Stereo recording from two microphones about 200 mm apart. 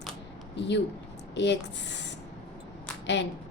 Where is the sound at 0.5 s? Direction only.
60° left (ahead or behind).